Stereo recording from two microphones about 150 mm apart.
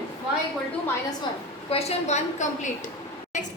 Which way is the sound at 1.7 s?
45° left (ahead or behind).